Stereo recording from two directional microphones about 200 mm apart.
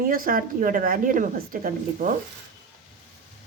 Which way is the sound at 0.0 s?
45° right (ahead or behind).